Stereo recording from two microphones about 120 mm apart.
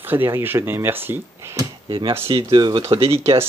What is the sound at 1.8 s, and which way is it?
Speech, 45° right (ahead or behind).